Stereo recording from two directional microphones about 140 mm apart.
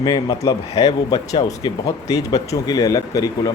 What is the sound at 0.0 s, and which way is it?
Speech, 30° left (ahead or behind).